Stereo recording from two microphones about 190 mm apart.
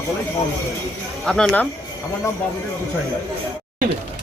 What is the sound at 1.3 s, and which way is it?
Speech, 5° left (ahead or behind).